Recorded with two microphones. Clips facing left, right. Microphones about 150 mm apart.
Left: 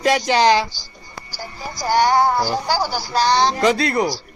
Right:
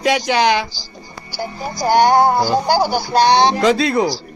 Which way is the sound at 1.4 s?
55° right (ahead or behind).